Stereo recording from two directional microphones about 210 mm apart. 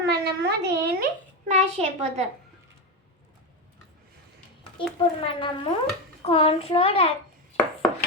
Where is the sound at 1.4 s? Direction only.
30° right (ahead or behind).